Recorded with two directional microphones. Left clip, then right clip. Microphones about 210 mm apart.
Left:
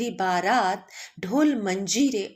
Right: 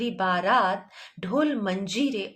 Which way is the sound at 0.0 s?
25° left (ahead or behind).